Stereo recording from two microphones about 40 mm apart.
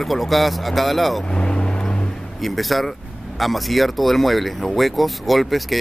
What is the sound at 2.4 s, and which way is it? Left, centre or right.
Speech, centre.